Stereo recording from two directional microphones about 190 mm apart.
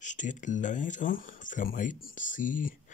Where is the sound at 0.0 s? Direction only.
40° left (ahead or behind).